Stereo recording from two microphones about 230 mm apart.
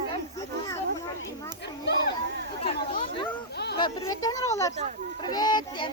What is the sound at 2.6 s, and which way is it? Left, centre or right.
Speech, left.